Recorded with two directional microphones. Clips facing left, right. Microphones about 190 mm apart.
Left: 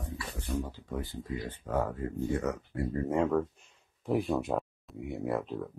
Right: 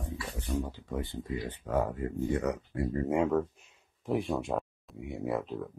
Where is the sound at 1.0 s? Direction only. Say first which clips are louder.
Right 1 dB; 20° right (ahead or behind).